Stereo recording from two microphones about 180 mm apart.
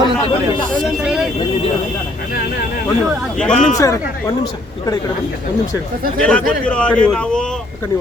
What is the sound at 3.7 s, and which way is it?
Speech, 15° left (ahead or behind).